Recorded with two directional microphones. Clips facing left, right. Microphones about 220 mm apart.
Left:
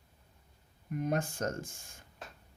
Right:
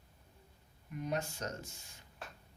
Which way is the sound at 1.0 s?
50° left (ahead or behind).